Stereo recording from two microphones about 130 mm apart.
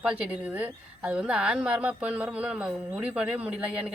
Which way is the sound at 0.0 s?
10° right (ahead or behind).